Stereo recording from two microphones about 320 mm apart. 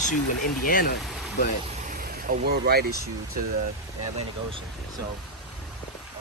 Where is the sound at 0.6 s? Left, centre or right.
Left.